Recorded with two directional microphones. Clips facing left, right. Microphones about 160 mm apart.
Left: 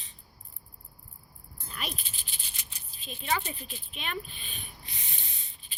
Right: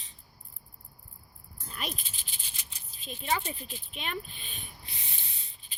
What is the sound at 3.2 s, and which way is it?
Speech, 30° right (ahead or behind).